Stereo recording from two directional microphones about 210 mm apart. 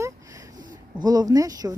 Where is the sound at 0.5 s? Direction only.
40° right (ahead or behind).